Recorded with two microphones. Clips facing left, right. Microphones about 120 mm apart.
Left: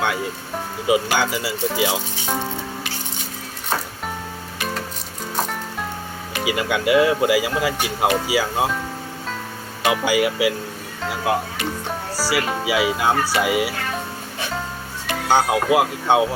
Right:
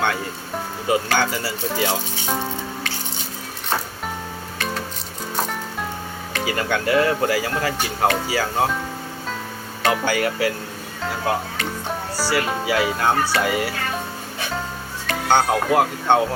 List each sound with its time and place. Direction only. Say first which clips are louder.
0.9 s speech: left 1 dB; 10° left (ahead or behind)
6.3 s speech: left 1 dB; 10° left (ahead or behind)
9.8 s speech: left 2 dB; 10° left (ahead or behind)
11.0 s music: left 1 dB; 5° left (ahead or behind)
12.1 s speech: even; 5° left (ahead or behind)
15.1 s speech: even; 5° left (ahead or behind)